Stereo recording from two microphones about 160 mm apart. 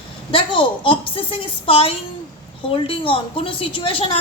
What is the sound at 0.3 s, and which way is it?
A woman's voice, 35° left (ahead or behind).